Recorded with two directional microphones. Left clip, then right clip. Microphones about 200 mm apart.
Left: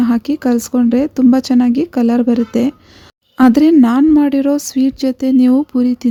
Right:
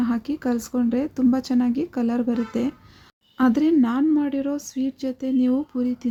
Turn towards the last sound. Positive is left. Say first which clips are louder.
# left 10 dB
turn(degrees=40)  # may be behind; listen again after turning